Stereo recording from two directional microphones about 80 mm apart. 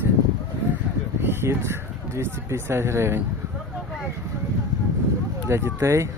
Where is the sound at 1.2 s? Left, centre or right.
Right.